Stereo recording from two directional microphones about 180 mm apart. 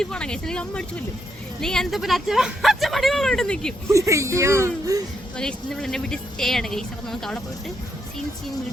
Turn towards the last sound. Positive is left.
turn(degrees=0)  # may be behind; listen again after turning